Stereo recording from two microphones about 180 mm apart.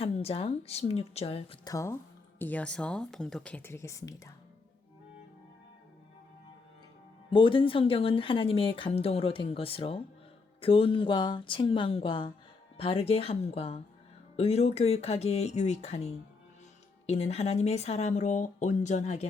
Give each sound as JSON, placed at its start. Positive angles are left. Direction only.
{"t": 0.0, "sound": "speech", "side_deg": 35}
{"t": 1.6, "sound": "speech", "side_deg": 15}
{"t": 7.3, "sound": "speech", "side_deg": 30}